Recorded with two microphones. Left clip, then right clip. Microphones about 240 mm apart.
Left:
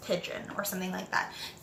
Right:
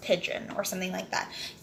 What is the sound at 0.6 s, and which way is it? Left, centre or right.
Speech, centre.